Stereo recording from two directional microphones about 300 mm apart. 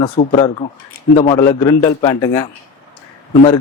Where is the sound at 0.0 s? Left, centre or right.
Centre.